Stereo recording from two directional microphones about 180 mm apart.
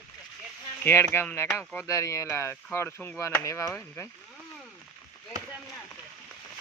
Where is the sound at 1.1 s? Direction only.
15° left (ahead or behind).